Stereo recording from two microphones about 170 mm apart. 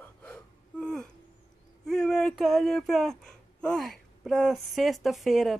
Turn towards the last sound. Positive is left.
turn(degrees=0)  # may be behind; listen again after turning